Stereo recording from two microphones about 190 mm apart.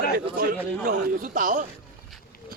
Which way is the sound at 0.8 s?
50° right (ahead or behind).